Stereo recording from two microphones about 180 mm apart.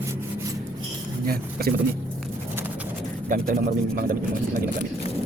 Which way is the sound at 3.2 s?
50° right (ahead or behind).